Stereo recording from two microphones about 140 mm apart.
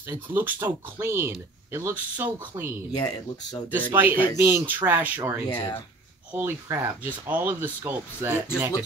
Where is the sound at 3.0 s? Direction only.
30° left (ahead or behind).